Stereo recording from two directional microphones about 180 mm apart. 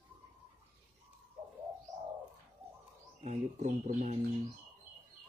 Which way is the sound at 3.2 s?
40° right (ahead or behind).